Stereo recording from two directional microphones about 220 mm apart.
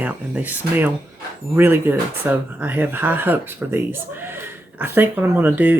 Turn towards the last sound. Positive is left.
turn(degrees=-10)  # may be behind; listen again after turning